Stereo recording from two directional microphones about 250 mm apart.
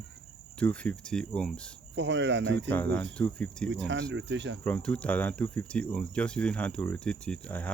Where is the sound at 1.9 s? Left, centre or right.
Right.